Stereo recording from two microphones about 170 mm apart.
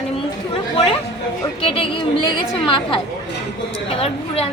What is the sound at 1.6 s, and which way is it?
Speech, 35° left (ahead or behind).